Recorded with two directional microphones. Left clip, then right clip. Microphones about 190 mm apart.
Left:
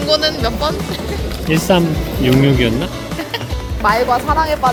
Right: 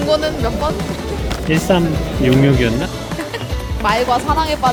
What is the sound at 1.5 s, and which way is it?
Speech, 10° left (ahead or behind).